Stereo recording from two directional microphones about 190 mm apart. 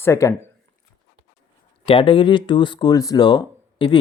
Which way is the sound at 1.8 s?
30° left (ahead or behind).